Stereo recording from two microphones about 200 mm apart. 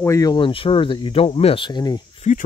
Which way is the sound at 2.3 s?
35° left (ahead or behind).